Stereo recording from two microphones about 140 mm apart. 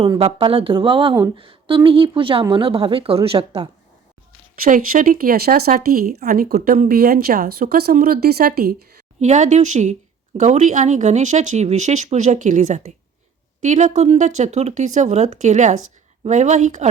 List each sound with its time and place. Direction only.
0.2 s a woman's voice: 40° right (ahead or behind)
4.6 s speech: 80° right
9.2 s a woman's voice: 60° right (ahead or behind)